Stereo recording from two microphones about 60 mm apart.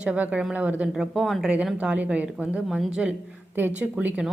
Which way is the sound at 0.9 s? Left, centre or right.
Centre.